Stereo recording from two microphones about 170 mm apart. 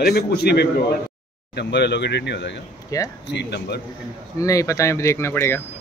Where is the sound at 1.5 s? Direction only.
90° left.